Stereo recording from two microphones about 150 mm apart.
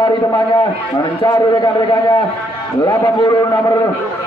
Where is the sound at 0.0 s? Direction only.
30° left (ahead or behind).